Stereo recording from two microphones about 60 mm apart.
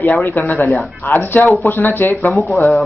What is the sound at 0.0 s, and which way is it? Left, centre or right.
A man's voice, left.